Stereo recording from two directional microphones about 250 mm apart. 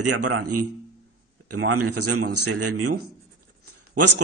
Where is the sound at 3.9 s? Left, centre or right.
Right.